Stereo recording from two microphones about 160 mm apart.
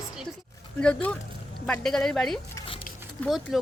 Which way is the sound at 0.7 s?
10° left (ahead or behind).